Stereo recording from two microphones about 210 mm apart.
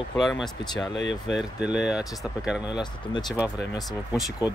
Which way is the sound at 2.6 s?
20° left (ahead or behind).